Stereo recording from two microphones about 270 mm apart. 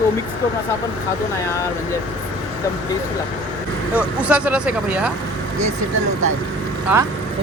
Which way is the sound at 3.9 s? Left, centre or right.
Centre.